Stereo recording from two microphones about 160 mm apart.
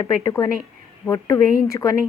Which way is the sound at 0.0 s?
20° left (ahead or behind).